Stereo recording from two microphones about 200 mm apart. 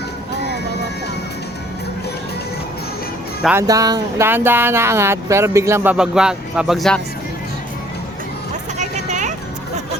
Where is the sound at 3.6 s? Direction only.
20° right (ahead or behind); by 7.0 s centre (ahead or behind).